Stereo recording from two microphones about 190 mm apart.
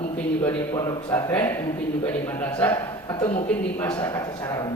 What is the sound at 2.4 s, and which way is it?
Speech, 10° left (ahead or behind).